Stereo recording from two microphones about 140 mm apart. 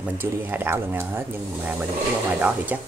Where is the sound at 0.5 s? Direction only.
15° right (ahead or behind).